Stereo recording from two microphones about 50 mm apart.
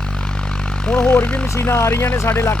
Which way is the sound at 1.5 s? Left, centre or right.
Left.